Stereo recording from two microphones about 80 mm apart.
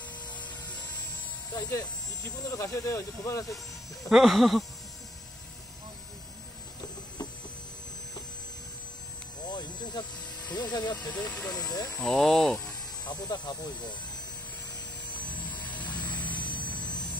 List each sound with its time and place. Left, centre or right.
2.2 s speech: left
4.1 s speech: centre
9.5 s a sound: left
10.5 s speech: left
11.1 s speech: centre
11.5 s speech: left
12.0 s speech: centre
13.0 s speech: left
15.0 s vehicle: centre